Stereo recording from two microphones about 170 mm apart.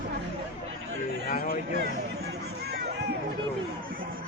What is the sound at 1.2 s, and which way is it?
Speech, 55° left (ahead or behind).